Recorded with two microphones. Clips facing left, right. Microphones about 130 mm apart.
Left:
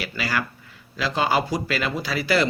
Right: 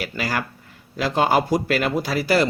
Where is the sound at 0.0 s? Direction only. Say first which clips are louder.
Right 1 dB; 45° right (ahead or behind).